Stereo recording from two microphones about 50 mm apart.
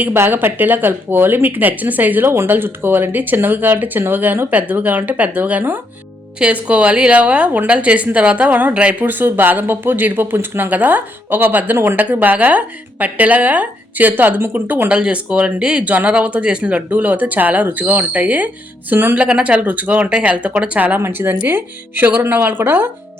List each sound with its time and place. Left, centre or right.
0.3 s speech: right
8.7 s speech: right
9.0 s speech: right
10.7 s speech: right
14.8 s speech: right
20.1 s speech: centre
21.0 s speech: right